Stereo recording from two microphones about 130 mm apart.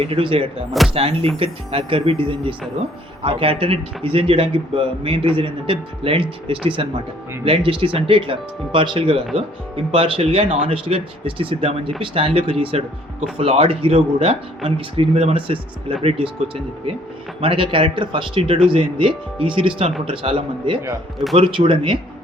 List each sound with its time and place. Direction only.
0.0 s speech: 45° right (ahead or behind)
17.4 s speech: 45° right (ahead or behind)